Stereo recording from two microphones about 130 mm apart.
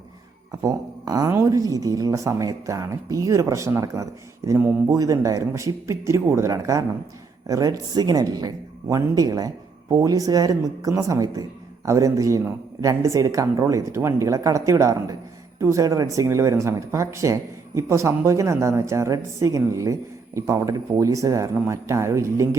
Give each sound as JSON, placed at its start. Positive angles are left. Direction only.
{"t": 0.5, "sound": "speech", "side_deg": -25}